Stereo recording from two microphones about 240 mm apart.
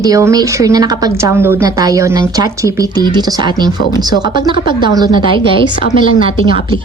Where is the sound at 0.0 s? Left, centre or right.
Centre.